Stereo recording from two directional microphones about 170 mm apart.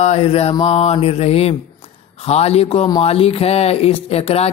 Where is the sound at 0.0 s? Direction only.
40° left (ahead or behind).